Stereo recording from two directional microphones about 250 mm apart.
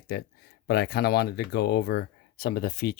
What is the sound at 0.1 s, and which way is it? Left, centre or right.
Speech, left.